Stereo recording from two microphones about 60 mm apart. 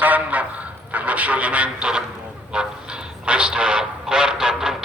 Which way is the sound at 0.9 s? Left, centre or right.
Right.